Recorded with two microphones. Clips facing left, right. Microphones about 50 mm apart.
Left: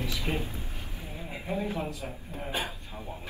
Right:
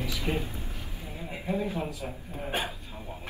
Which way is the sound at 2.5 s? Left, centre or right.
Right.